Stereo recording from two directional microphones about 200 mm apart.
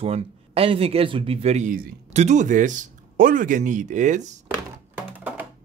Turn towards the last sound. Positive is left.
turn(degrees=-5)  # may be behind; listen again after turning